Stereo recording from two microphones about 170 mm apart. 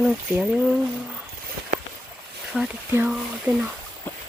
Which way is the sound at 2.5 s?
5° right (ahead or behind).